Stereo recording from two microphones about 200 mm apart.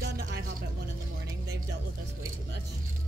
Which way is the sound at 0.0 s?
50° right (ahead or behind).